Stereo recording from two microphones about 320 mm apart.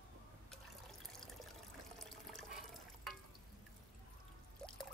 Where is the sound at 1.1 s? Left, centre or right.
Centre.